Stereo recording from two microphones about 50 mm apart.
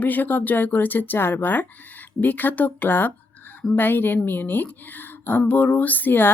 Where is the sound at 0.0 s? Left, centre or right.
Left.